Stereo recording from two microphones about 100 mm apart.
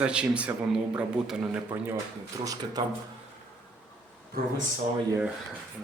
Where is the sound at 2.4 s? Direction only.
35° right (ahead or behind).